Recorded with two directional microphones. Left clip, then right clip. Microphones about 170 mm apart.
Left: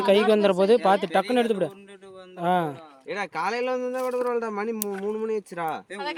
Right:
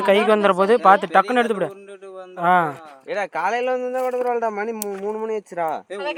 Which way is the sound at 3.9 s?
70° left (ahead or behind).